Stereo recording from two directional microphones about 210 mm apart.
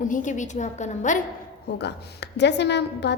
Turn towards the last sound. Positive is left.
turn(degrees=55)  # may be behind; listen again after turning